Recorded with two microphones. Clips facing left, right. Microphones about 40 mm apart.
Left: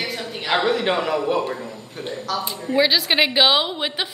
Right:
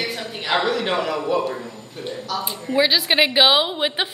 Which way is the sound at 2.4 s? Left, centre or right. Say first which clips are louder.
Even; centre.